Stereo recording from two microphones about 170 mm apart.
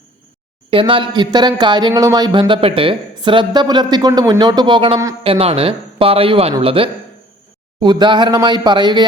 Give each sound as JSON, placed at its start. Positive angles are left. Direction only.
{"t": 0.7, "sound": "speech", "side_deg": -30}